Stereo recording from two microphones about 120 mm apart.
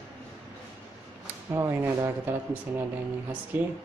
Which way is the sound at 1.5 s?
20° right (ahead or behind).